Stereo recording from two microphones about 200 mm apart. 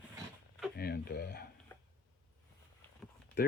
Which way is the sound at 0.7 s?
50° left (ahead or behind).